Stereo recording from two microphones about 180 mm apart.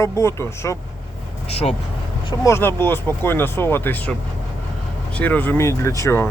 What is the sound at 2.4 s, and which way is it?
Speech, 15° left (ahead or behind).